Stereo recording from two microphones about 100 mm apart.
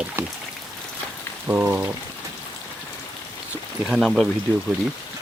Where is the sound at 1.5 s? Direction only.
15° right (ahead or behind).